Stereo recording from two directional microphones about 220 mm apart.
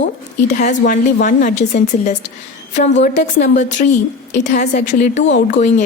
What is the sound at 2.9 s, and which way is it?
Speech, 50° left (ahead or behind).